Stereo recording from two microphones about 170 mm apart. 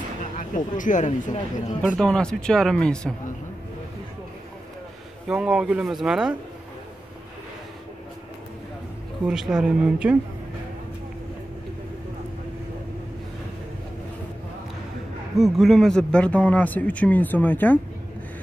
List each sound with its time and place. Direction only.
0.4 s speech: 50° left (ahead or behind)
1.8 s speech: 5° left (ahead or behind)
5.3 s speech: 5° right (ahead or behind)
9.2 s speech: 5° right (ahead or behind)
15.3 s speech: centre (ahead or behind)